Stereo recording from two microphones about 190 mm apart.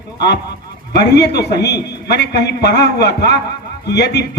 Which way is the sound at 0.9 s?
60° left (ahead or behind).